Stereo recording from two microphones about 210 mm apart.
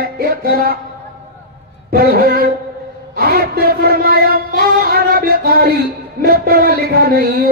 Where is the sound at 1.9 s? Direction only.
45° right (ahead or behind).